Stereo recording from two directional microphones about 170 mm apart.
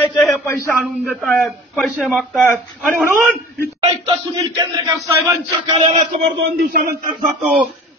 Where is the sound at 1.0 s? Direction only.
5° left (ahead or behind).